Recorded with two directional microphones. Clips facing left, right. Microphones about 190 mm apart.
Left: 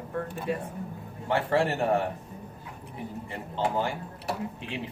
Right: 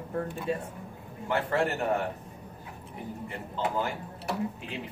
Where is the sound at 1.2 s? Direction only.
30° left (ahead or behind).